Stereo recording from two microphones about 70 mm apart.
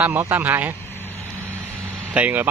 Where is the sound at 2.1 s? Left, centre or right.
Centre.